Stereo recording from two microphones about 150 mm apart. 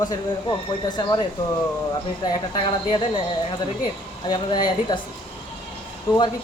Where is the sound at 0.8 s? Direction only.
30° left (ahead or behind).